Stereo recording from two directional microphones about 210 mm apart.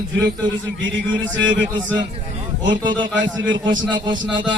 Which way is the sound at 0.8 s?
60° right (ahead or behind).